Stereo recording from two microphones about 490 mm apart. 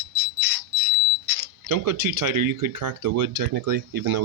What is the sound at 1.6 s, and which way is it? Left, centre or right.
Speech, right.